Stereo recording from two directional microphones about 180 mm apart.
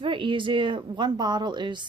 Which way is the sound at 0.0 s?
30° right (ahead or behind).